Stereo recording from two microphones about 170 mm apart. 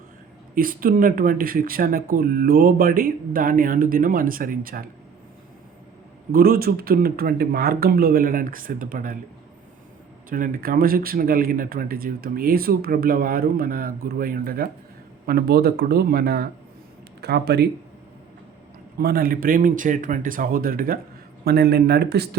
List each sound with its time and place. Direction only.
0.5 s speech: 55° right (ahead or behind)
6.3 s speech: 60° right (ahead or behind)
10.2 s speech: 55° right (ahead or behind); by 17.7 s 75° right (ahead or behind)
18.9 s speech: 60° right (ahead or behind)
21.4 s speech: 70° right (ahead or behind)